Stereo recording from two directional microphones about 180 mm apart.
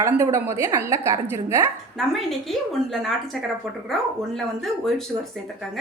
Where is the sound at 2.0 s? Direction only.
Centre (ahead or behind).